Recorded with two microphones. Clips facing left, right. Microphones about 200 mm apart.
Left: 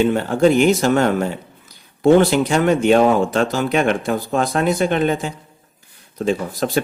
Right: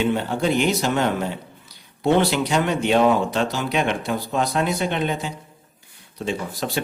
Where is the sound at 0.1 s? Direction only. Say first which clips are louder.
Left 6 dB; 45° left (ahead or behind).